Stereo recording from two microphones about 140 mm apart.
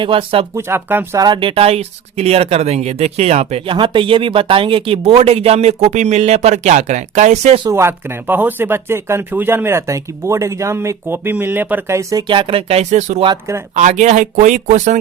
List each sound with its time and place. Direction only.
0.0 s speech: 40° right (ahead or behind)
0.5 s speech: 15° right (ahead or behind)
1.2 s speech: 35° right (ahead or behind); by 7.6 s 55° right (ahead or behind)
7.7 s speech: 20° right (ahead or behind)
12.3 s speech: 40° right (ahead or behind); by 13.2 s 55° right (ahead or behind)
13.2 s speech: 20° right (ahead or behind)
13.7 s speech: 55° right (ahead or behind)